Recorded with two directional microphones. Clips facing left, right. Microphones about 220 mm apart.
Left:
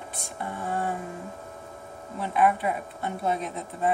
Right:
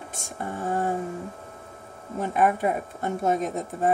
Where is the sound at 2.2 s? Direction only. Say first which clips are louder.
Right 1 dB; 45° right (ahead or behind).